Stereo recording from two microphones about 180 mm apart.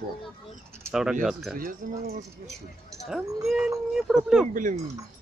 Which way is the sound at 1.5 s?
50° right (ahead or behind).